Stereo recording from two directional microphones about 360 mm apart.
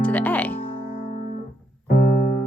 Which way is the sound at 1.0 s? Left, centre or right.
Centre.